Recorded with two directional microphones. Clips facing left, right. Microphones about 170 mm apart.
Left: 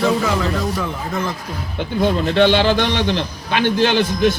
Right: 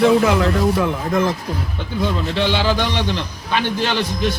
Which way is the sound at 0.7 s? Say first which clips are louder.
Right 5 dB; 60° right (ahead or behind).